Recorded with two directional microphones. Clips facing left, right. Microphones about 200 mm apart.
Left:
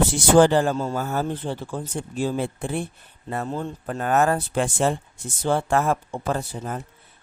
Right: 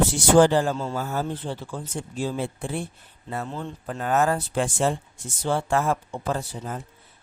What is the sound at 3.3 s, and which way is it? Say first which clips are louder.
Speech: left 3 dB; 45° left (ahead or behind).